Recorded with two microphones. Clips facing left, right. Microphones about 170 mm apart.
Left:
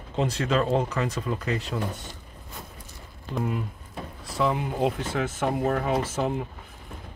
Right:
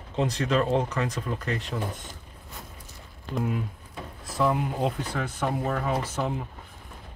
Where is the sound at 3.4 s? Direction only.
Centre (ahead or behind).